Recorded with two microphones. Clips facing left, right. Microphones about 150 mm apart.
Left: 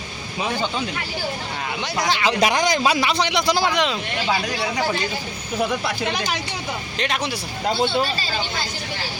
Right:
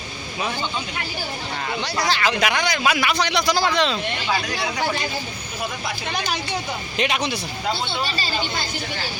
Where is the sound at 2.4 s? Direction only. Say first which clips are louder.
Left 6 dB; 35° left (ahead or behind); by 4.0 s 15° left (ahead or behind).